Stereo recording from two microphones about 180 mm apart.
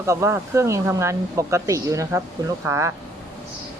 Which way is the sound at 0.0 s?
15° right (ahead or behind).